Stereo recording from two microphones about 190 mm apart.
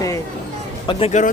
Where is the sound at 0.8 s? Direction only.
30° left (ahead or behind).